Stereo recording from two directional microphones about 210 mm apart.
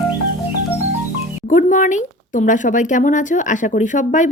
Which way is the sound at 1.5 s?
40° left (ahead or behind).